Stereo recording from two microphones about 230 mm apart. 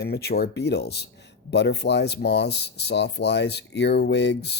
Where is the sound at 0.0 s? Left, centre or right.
Left.